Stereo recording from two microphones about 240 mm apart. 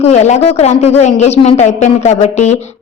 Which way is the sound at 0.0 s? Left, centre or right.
Left.